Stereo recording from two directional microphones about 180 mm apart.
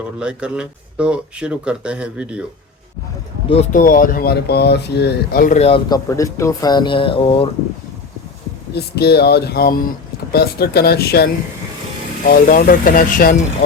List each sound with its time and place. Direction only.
0.2 s speech: 5° right (ahead or behind)
3.5 s speech: 40° left (ahead or behind)
5.5 s speech: 35° left (ahead or behind)
5.9 s speech: 15° left (ahead or behind)
8.7 s speech: 65° left (ahead or behind)
12.3 s speech: 50° left (ahead or behind)